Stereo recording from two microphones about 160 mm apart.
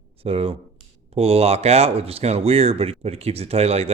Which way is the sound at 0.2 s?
35° right (ahead or behind).